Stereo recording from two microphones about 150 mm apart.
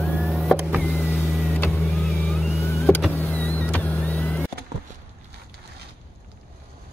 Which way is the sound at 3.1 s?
10° left (ahead or behind).